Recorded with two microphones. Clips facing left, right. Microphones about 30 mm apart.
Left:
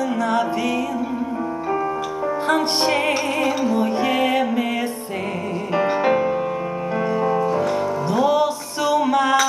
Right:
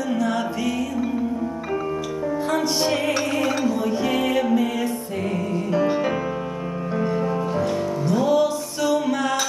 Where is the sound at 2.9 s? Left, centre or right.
Left.